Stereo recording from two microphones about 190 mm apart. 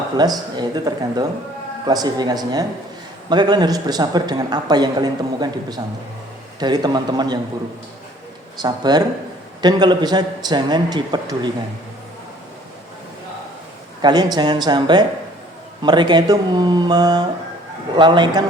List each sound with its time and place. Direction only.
0.2 s a man's voice: 20° right (ahead or behind)
8.5 s a man's voice: 20° right (ahead or behind)
14.0 s a man's voice: 20° right (ahead or behind)